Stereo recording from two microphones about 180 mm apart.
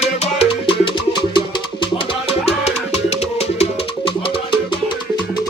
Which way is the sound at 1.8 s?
30° left (ahead or behind).